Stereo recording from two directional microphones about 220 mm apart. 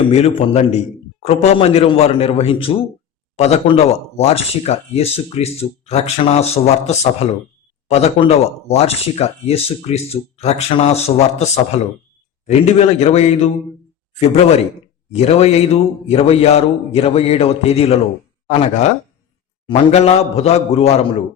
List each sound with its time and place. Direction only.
0.1 s speech: 30° left (ahead or behind)
19.6 s speech: 30° left (ahead or behind)